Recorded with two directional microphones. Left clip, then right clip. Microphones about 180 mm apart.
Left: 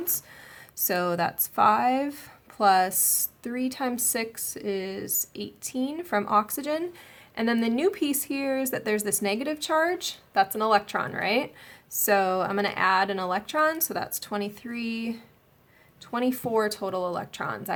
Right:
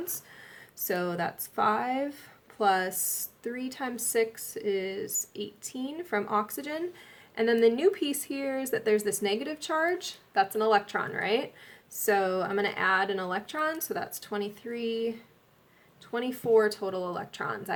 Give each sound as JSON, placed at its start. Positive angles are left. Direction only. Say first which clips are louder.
{"t": 0.9, "sound": "speech", "louder": "left 5 dB", "side_deg": 45}
{"t": 16.1, "sound": "speech", "louder": "right 1 dB", "side_deg": 40}